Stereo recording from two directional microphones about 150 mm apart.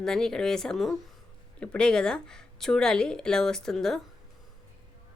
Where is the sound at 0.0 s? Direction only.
5° left (ahead or behind).